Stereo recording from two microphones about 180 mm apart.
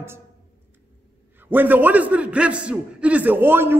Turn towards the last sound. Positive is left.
turn(degrees=-10)  # may be behind; listen again after turning